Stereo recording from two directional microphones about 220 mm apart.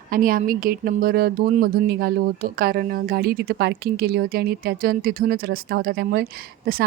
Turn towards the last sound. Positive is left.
turn(degrees=-45)  # may be behind; listen again after turning